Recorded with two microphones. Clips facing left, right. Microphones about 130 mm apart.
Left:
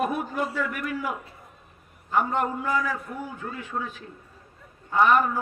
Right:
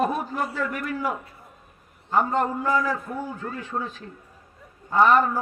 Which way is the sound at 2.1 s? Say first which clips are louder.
Right 2 dB; 35° right (ahead or behind).